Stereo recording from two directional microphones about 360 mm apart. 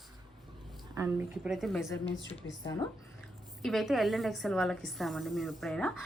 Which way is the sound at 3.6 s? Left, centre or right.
Centre.